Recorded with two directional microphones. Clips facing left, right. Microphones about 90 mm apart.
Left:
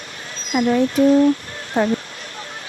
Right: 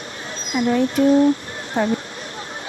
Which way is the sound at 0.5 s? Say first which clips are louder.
Left 2 dB; 40° left (ahead or behind).